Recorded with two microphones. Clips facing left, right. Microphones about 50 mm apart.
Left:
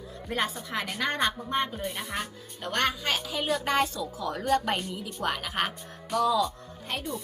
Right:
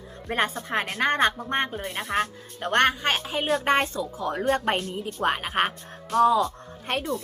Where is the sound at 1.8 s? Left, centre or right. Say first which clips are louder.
Right 6 dB; right.